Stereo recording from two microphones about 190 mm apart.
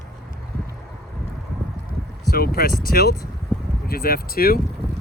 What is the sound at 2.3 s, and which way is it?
Speech, 50° left (ahead or behind).